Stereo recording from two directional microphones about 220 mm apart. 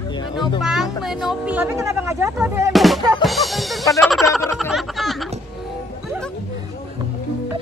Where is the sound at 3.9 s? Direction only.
Centre (ahead or behind).